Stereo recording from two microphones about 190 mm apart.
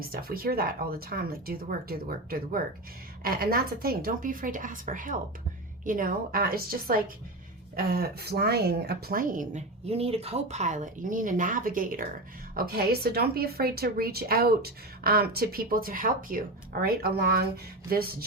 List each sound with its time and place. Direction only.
0.0 s speech: 50° right (ahead or behind)